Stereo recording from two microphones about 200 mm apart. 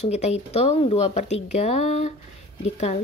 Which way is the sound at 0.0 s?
35° left (ahead or behind).